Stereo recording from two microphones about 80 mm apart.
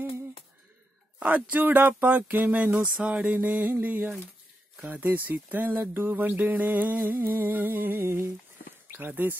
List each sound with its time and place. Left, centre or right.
1.2 s speech: right